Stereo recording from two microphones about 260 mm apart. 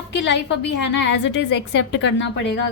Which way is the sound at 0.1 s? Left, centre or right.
Left.